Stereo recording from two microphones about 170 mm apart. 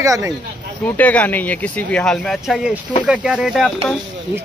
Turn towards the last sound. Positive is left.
turn(degrees=0)  # may be behind; listen again after turning